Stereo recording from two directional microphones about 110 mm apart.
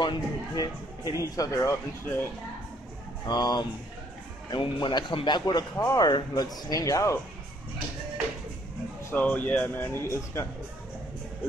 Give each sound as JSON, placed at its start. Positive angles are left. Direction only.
{"t": 0.0, "sound": "speech", "side_deg": 40}
{"t": 3.3, "sound": "speech", "side_deg": 40}
{"t": 9.1, "sound": "speech", "side_deg": 15}